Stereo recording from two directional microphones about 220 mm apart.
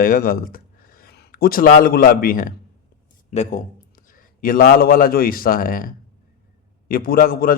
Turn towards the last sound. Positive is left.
turn(degrees=40)  # may be behind; listen again after turning